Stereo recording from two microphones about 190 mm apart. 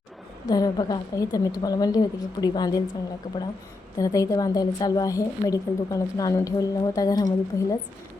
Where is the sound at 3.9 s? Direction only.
20° left (ahead or behind).